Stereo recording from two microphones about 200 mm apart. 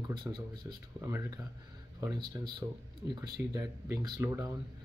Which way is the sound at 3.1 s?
20° right (ahead or behind).